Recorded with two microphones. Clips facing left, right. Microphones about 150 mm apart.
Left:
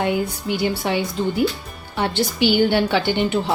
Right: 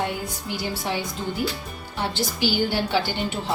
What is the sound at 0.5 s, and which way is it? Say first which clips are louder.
Speech: left 7 dB; 65° left (ahead or behind).